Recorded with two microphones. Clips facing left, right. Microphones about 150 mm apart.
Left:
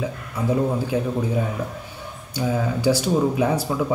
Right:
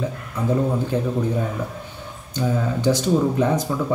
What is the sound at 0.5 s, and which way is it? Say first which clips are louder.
Speech: even; 10° left (ahead or behind).